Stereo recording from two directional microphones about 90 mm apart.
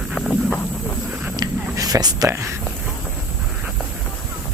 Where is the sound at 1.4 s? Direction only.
45° right (ahead or behind).